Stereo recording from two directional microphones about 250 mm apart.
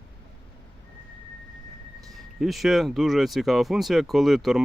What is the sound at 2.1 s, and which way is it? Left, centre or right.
Speech, centre.